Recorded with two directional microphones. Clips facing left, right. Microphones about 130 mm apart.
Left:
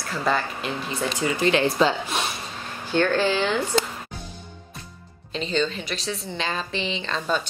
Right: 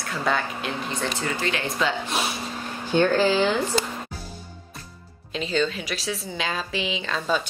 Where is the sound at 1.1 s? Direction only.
15° left (ahead or behind).